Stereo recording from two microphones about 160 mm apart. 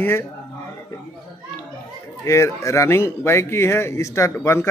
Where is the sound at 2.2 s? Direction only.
20° left (ahead or behind).